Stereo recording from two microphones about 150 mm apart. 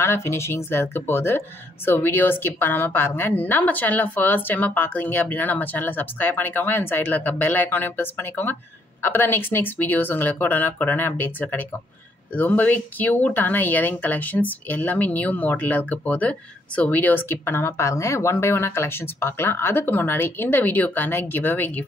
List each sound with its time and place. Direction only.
0.0 s speech: 15° left (ahead or behind)